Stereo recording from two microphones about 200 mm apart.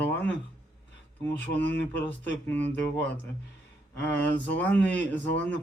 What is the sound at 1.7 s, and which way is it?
Speech, 10° left (ahead or behind).